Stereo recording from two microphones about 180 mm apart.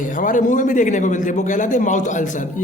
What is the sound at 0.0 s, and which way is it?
A man's voice, 45° left (ahead or behind).